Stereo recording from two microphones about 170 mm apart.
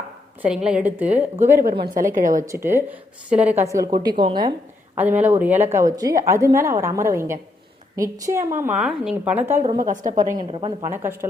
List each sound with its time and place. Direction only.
0.4 s a woman's voice: 5° right (ahead or behind)
1.7 s a woman's voice: 25° right (ahead or behind)
2.1 s a woman's voice: 50° right (ahead or behind)
2.5 s a woman's voice: 15° right (ahead or behind); by 4.5 s 30° right (ahead or behind)
4.9 s a woman's voice: 10° right (ahead or behind)
9.8 s a woman's voice: 50° right (ahead or behind)
10.5 s a woman's voice: 30° right (ahead or behind)
10.8 s a woman's voice: 15° right (ahead or behind)